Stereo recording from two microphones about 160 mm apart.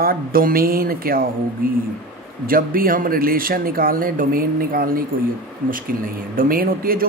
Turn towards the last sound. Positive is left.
turn(degrees=-65)  # may be behind; listen again after turning